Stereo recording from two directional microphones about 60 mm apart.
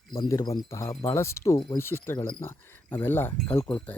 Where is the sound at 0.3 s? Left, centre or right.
Left.